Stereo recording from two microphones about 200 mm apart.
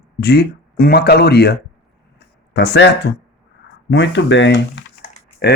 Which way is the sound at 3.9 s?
60° left (ahead or behind).